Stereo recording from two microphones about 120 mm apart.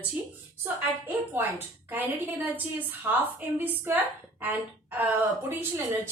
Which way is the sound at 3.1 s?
15° right (ahead or behind).